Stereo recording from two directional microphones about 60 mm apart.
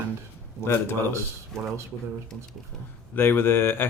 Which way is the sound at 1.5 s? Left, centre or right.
Centre.